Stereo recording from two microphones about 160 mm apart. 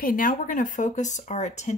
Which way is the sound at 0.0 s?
60° left (ahead or behind).